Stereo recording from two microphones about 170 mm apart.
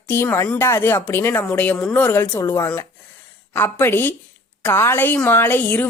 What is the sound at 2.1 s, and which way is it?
Speech, 15° left (ahead or behind).